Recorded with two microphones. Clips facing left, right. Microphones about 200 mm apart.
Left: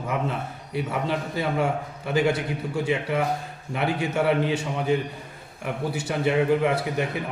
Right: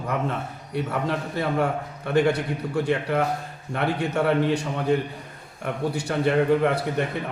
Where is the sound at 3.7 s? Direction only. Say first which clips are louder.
Right 1 dB; 5° left (ahead or behind).